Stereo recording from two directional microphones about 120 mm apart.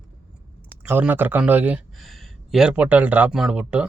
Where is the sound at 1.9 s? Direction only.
Centre (ahead or behind).